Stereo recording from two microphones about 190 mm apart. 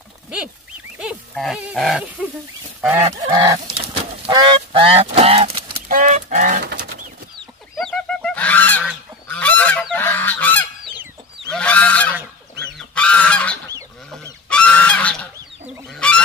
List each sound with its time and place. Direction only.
0.9 s speech: centre (ahead or behind)
2.9 s goose: 20° right (ahead or behind)
5.9 s chicken: 40° right (ahead or behind)
6.6 s pigeon: 55° right (ahead or behind)
7.7 s goose: 5° left (ahead or behind)